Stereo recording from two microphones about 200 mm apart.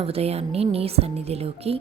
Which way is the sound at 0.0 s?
30° right (ahead or behind).